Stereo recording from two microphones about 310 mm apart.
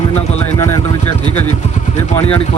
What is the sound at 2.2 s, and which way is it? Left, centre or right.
Speech, centre.